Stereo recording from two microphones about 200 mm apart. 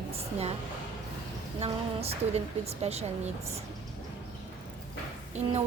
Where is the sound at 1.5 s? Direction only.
30° right (ahead or behind).